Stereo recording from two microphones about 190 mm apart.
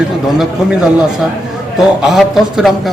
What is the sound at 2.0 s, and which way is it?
Speech, centre (ahead or behind).